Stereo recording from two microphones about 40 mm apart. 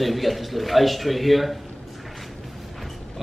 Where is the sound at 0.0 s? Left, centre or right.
Centre.